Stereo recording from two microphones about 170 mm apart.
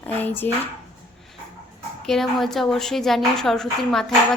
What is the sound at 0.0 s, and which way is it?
Speech, 10° left (ahead or behind).